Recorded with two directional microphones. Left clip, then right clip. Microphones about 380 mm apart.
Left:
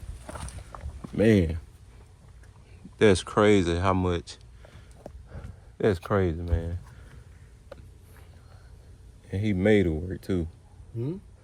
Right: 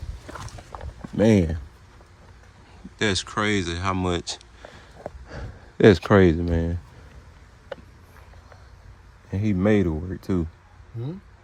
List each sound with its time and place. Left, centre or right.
1.1 s speech: centre
3.0 s speech: centre
5.7 s speech: right
9.3 s speech: centre